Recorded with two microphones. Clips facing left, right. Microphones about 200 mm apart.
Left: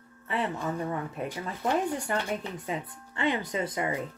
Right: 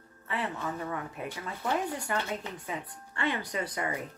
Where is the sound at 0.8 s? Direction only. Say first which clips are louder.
Left 4 dB; 25° left (ahead or behind).